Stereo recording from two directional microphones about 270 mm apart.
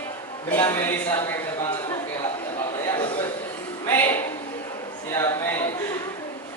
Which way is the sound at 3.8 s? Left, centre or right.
Centre.